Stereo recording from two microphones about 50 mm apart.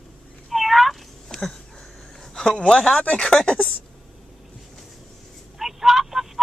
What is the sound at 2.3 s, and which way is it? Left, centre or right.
Speech, left.